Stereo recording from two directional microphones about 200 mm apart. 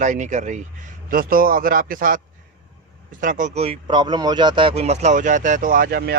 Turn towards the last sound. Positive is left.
turn(degrees=-50)  # may be behind; listen again after turning